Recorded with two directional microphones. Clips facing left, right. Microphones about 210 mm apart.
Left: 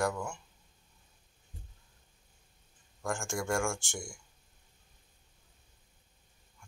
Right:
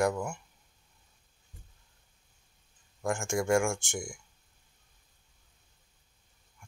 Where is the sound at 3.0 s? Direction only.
20° right (ahead or behind).